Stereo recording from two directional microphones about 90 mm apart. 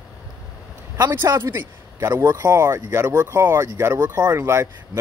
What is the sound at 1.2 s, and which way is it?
Speech, 35° right (ahead or behind).